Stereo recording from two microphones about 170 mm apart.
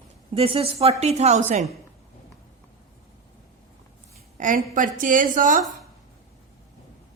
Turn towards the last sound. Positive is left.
turn(degrees=-50)  # may be behind; listen again after turning